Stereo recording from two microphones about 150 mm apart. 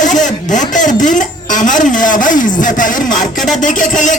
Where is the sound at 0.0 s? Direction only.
55° left (ahead or behind).